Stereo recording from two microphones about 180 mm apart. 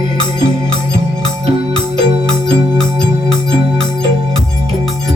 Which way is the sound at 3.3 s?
30° right (ahead or behind).